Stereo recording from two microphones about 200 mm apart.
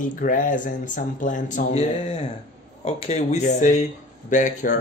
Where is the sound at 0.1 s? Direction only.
45° left (ahead or behind).